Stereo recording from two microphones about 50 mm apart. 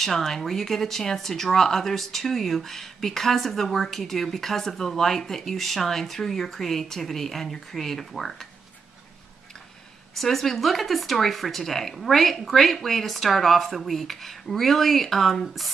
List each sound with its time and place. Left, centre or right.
0.0 s speech: centre
10.1 s speech: centre